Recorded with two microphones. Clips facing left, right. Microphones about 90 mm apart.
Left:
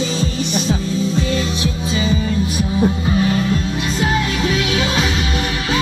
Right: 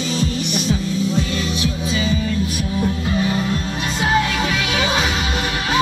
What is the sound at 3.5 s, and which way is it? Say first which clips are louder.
Music: left 3 dB; 30° right (ahead or behind).